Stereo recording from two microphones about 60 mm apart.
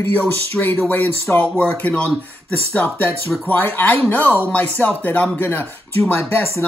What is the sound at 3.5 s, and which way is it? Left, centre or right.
Speech, left.